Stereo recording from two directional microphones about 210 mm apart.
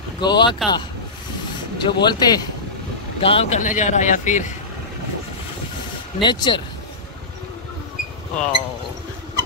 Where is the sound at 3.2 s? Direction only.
25° left (ahead or behind).